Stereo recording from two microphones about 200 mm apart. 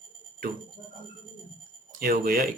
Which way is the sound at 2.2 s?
50° right (ahead or behind).